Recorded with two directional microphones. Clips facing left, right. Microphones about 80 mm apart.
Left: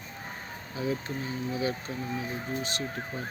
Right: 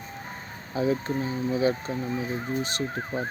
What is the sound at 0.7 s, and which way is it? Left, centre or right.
Speech, right.